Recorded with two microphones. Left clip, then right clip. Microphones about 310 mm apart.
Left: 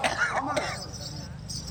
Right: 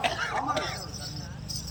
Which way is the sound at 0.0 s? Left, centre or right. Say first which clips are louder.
Left 2 dB; centre.